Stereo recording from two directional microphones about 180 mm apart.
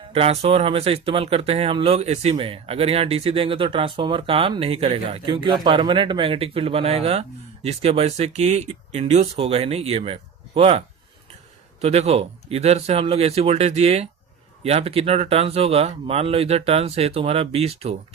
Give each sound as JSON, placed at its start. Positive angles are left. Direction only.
{"t": 0.1, "sound": "speech", "side_deg": -35}